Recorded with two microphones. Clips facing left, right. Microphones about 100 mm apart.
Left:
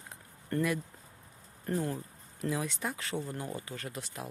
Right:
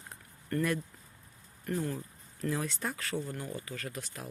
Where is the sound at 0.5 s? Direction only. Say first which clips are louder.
Even; 25° left (ahead or behind).